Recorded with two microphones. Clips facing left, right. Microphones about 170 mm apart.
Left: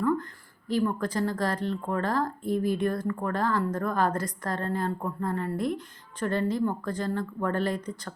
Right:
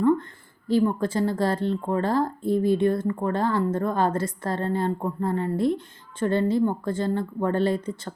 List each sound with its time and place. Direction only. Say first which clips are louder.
0.7 s speech: right 5 dB; 25° right (ahead or behind)